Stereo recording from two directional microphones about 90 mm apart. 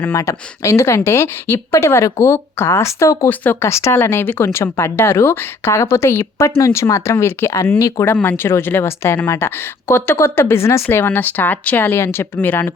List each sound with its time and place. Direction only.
0.0 s a woman's voice: 30° left (ahead or behind)
3.2 s a woman's voice: 20° left (ahead or behind); by 8.0 s 40° left (ahead or behind)
8.0 s speech: 20° left (ahead or behind)